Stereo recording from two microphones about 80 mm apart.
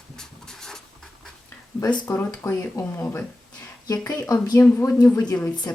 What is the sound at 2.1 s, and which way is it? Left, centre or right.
Speech, left.